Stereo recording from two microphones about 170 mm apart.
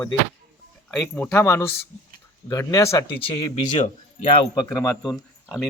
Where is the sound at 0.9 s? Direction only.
5° left (ahead or behind).